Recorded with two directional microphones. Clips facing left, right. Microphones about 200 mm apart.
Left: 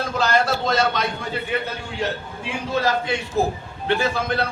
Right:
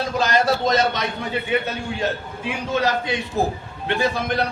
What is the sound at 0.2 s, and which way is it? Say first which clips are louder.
Speech: right 1 dB; 15° right (ahead or behind).